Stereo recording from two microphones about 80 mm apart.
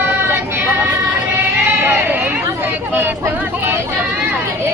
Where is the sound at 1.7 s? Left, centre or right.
Right.